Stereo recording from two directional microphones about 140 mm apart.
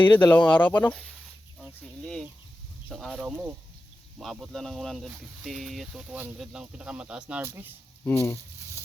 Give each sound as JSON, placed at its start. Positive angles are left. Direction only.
{"t": 0.0, "sound": "speech", "side_deg": 10}
{"t": 8.0, "sound": "speech", "side_deg": 15}